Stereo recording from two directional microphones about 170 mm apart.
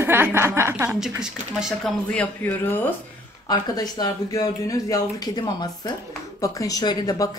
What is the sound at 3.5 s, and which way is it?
Speech, 20° left (ahead or behind).